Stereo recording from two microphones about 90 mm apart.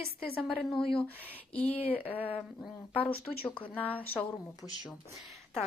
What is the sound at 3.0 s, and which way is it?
Speech, 90° left.